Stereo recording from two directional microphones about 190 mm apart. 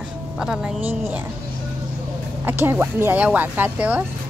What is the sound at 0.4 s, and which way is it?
Speech, 5° right (ahead or behind).